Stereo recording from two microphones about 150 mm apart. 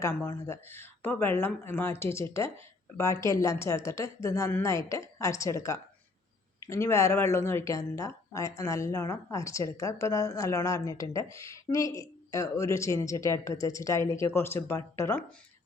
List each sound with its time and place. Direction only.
0.0 s speech: 15° left (ahead or behind)